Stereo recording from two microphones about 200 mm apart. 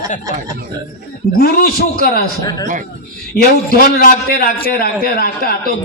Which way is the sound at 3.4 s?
50° left (ahead or behind).